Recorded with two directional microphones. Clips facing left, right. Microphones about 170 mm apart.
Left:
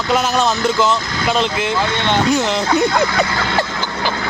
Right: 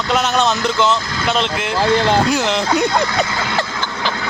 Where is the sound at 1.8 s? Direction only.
35° right (ahead or behind).